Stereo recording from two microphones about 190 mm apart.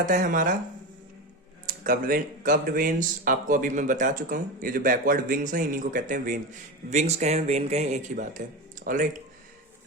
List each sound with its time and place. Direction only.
0.0 s speech: 45° right (ahead or behind)
1.6 s speech: 45° right (ahead or behind)